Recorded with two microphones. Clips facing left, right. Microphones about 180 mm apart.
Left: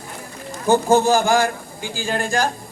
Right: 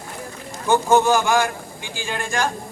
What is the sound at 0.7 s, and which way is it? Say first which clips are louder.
A man's voice: left 1 dB; 35° left (ahead or behind).